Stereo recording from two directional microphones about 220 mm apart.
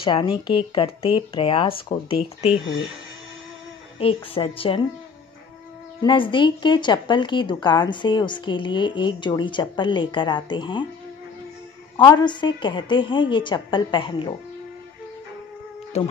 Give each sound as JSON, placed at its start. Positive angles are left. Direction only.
{"t": 0.0, "sound": "a woman's voice", "side_deg": 20}
{"t": 4.0, "sound": "a woman's voice", "side_deg": 25}
{"t": 6.0, "sound": "a woman's voice", "side_deg": 20}
{"t": 12.0, "sound": "a woman's voice", "side_deg": 20}
{"t": 16.0, "sound": "a woman's voice", "side_deg": 30}